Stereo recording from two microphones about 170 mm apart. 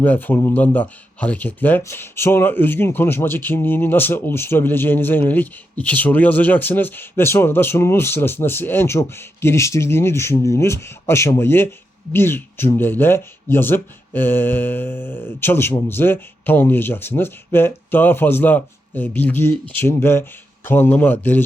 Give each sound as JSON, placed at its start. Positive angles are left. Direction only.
{"t": 0.0, "sound": "speech", "side_deg": 10}